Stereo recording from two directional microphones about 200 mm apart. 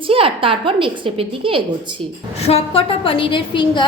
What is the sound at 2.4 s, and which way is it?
A woman's voice, 30° left (ahead or behind).